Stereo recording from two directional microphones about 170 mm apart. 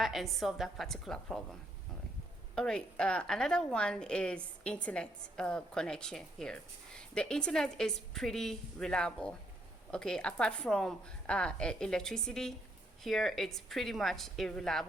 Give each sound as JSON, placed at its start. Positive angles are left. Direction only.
{"t": 0.0, "sound": "a woman's voice", "side_deg": 0}
{"t": 2.6, "sound": "a woman's voice", "side_deg": 5}